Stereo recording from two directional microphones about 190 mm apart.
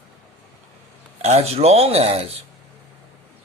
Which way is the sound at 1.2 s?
35° right (ahead or behind).